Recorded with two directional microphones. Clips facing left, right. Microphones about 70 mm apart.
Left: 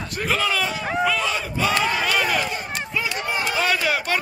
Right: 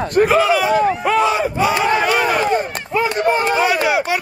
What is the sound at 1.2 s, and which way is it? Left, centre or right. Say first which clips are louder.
Battle cry: right 7 dB; right.